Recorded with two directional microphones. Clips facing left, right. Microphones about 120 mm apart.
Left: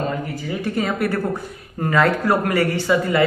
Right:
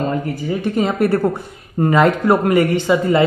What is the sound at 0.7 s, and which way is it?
A man's voice, 25° right (ahead or behind).